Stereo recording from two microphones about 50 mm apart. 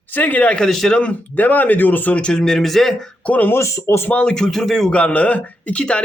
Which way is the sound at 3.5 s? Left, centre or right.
Left.